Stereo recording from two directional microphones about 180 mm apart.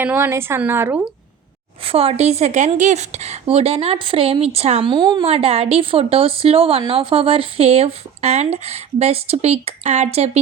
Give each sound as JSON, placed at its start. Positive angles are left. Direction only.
{"t": 0.0, "sound": "speech", "side_deg": -10}
{"t": 1.8, "sound": "a woman's voice", "side_deg": -30}